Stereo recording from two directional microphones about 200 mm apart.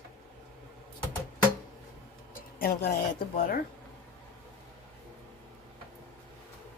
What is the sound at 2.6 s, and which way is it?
Speech, 40° left (ahead or behind).